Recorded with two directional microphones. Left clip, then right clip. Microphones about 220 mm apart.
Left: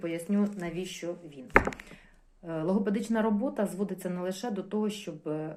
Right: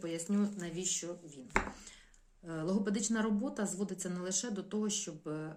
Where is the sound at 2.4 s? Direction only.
20° right (ahead or behind).